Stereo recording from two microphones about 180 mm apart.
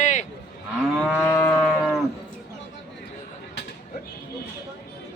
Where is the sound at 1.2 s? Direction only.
15° left (ahead or behind).